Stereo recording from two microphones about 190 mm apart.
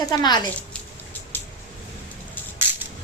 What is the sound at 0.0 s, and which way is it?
Speech, 20° left (ahead or behind).